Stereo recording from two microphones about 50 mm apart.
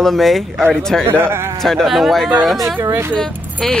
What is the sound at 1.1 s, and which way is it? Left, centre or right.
Speech, right.